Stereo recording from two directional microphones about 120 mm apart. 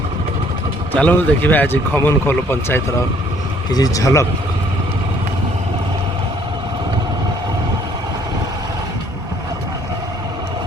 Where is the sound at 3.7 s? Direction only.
30° left (ahead or behind).